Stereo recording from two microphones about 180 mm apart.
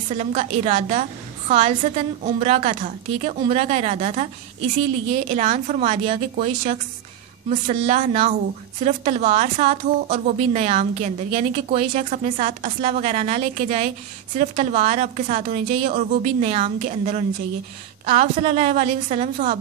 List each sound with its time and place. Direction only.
0.1 s speech: 40° right (ahead or behind)